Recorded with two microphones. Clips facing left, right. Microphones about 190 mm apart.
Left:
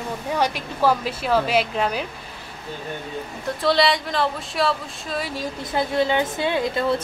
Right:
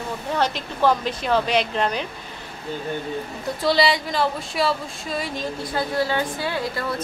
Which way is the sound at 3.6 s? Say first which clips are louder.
Even; centre (ahead or behind).